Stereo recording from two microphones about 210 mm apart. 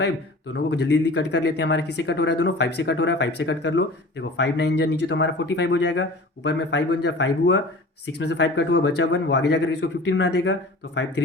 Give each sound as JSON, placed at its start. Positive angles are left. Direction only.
{"t": 0.5, "sound": "speech", "side_deg": 55}